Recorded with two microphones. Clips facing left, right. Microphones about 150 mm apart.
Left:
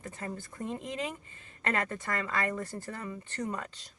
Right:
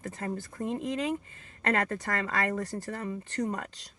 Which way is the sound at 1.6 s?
40° right (ahead or behind).